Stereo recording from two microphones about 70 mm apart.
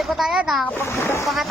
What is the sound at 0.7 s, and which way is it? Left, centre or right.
Speech, left.